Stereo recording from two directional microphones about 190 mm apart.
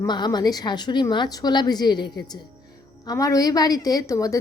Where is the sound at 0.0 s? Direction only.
20° left (ahead or behind).